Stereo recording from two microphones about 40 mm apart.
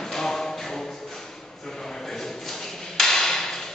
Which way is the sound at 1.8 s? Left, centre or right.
Centre.